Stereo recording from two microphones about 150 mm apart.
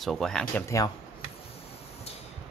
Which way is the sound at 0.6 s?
20° left (ahead or behind).